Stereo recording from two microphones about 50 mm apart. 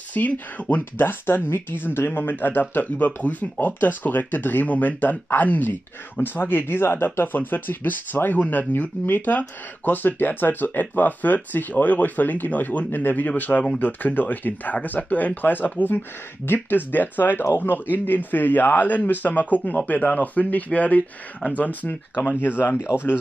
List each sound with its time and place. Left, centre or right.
0.1 s speech: left
7.2 s speech: left
22.8 s speech: right